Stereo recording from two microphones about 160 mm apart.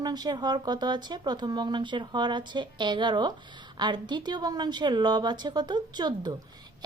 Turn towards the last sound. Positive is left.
turn(degrees=-25)  # may be behind; listen again after turning